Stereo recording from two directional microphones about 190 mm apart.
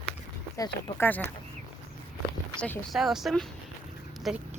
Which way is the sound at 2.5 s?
5° left (ahead or behind).